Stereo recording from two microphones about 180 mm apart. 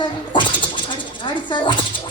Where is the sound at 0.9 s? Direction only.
25° left (ahead or behind).